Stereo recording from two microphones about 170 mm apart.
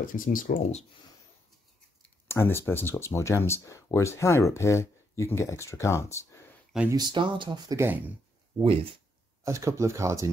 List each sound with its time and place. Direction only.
0.0 s speech: 55° left (ahead or behind)
2.2 s speech: 15° left (ahead or behind)
6.9 s speech: 25° right (ahead or behind)
9.4 s speech: 20° right (ahead or behind)